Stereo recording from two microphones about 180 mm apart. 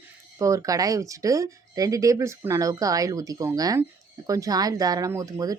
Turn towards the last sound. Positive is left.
turn(degrees=-20)  # may be behind; listen again after turning